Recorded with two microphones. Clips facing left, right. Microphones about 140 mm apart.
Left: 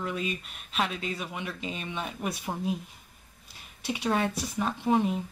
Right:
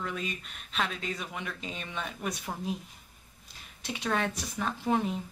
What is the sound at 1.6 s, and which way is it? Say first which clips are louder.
Speech: left 3 dB; 10° left (ahead or behind).